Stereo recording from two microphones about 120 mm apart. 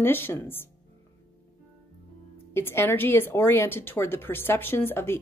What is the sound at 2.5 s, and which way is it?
A woman's voice, 20° left (ahead or behind).